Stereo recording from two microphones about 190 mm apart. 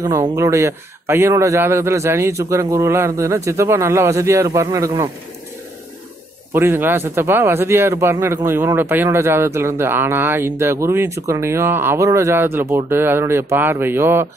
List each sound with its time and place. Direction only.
0.0 s speech: 15° right (ahead or behind)
6.5 s speech: 10° right (ahead or behind)